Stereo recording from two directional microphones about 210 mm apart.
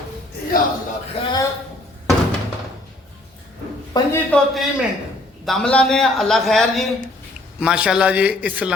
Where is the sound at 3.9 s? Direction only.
20° left (ahead or behind).